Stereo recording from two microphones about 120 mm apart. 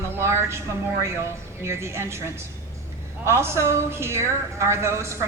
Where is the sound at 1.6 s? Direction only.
20° right (ahead or behind).